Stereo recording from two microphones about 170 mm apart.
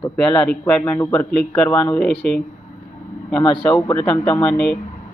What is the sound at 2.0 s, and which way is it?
Speech, 5° left (ahead or behind).